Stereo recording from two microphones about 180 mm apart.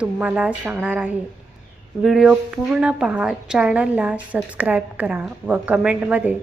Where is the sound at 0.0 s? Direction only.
5° right (ahead or behind).